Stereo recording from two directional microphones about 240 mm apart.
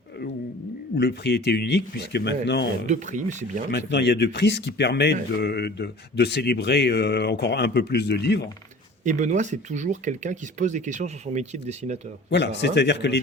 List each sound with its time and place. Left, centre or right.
0.9 s speech: left
2.8 s speech: right
3.7 s speech: left
9.0 s speech: right
12.3 s speech: left